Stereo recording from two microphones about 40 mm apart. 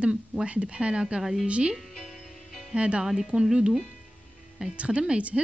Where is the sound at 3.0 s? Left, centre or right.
Centre.